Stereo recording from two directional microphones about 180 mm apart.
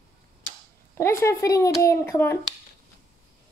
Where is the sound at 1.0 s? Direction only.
15° left (ahead or behind).